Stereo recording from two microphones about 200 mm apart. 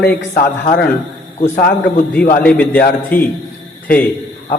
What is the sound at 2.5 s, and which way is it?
Speech, 5° left (ahead or behind).